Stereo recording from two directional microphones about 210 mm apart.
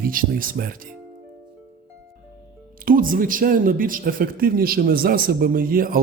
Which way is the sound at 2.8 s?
40° right (ahead or behind).